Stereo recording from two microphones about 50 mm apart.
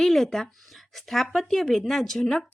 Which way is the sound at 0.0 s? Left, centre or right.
Centre.